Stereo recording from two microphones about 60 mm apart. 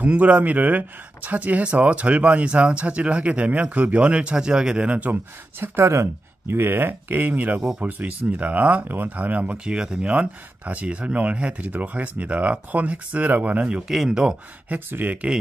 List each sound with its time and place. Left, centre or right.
0.0 s speech: right
5.6 s speech: right; by 14.3 s centre
14.7 s speech: right